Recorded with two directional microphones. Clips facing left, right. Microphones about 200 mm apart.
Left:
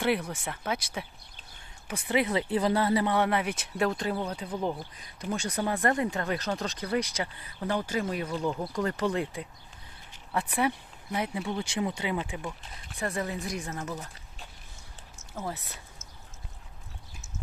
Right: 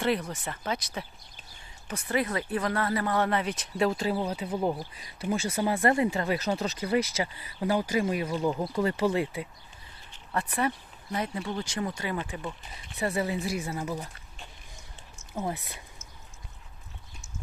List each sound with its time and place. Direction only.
0.0 s speech: 5° left (ahead or behind)
3.1 s speech: 10° left (ahead or behind)
3.7 s speech: centre (ahead or behind)
10.1 s speech: 10° left (ahead or behind)
13.0 s speech: 5° right (ahead or behind)
15.4 s speech: 15° right (ahead or behind)